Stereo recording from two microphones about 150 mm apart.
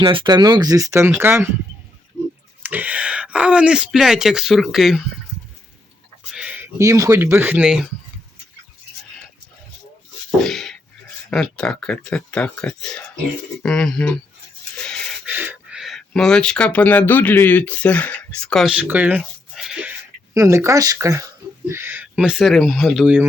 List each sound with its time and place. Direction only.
0.0 s speech: 35° right (ahead or behind); by 1.5 s 15° right (ahead or behind)
2.6 s speech: 10° right (ahead or behind)
6.3 s speech: 10° right (ahead or behind)
10.4 s speech: 5° left (ahead or behind)
14.8 s a sound: 5° left (ahead or behind)
15.3 s speech: 10° right (ahead or behind); by 18.7 s 5° left (ahead or behind)
18.8 s speech: 10° right (ahead or behind)
20.3 s speech: 20° right (ahead or behind); by 23.1 s centre (ahead or behind)